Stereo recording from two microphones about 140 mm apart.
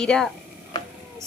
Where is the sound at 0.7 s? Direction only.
30° left (ahead or behind).